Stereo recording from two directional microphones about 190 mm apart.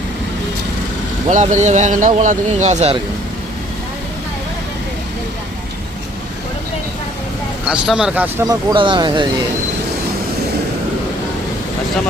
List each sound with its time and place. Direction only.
1.3 s speech: 40° right (ahead or behind)
7.7 s speech: 5° right (ahead or behind)
8.4 s speech: 25° right (ahead or behind)